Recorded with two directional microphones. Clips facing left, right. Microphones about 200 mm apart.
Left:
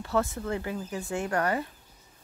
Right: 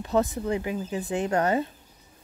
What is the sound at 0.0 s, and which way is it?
Speech, 20° right (ahead or behind).